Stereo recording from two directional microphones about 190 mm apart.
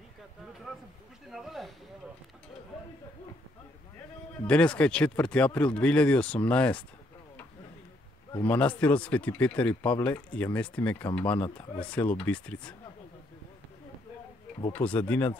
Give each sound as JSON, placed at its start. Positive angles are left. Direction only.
{"t": 1.3, "sound": "speech", "side_deg": 0}
{"t": 4.5, "sound": "speech", "side_deg": 5}
{"t": 8.4, "sound": "speech", "side_deg": 10}
{"t": 14.7, "sound": "speech", "side_deg": 5}